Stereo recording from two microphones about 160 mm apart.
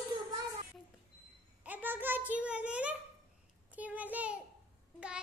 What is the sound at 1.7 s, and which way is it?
A child's voice, 10° right (ahead or behind).